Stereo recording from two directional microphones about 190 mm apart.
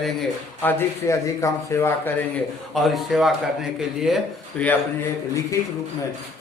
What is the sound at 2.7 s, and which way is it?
A man's voice, centre (ahead or behind).